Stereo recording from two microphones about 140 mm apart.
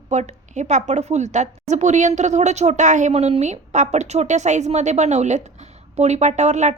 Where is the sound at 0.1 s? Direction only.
55° right (ahead or behind).